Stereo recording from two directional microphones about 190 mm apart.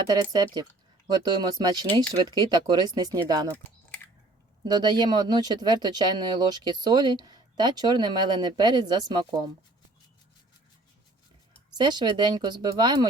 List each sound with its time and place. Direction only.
0.1 s speech: 20° right (ahead or behind)
4.6 s speech: 25° right (ahead or behind)
11.8 s speech: 25° right (ahead or behind)